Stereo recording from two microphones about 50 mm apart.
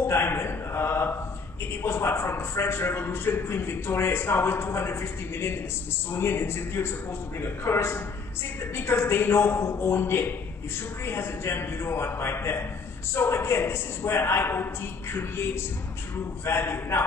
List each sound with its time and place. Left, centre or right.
0.0 s a sound: left
1.8 s a man's voice: left
6.1 s a man's voice: left